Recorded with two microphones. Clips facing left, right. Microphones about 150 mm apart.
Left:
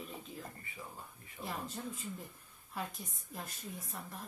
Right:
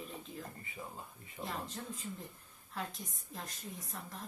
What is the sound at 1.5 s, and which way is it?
A woman's voice, 5° left (ahead or behind).